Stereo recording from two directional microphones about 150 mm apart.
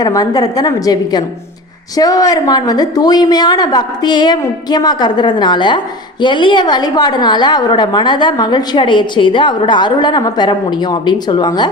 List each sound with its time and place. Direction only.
0.0 s a woman's voice: 25° left (ahead or behind)